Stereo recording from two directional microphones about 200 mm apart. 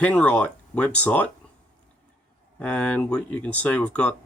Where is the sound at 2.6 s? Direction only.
5° left (ahead or behind).